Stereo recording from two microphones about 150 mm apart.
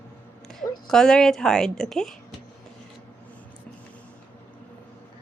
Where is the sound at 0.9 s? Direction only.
5° left (ahead or behind).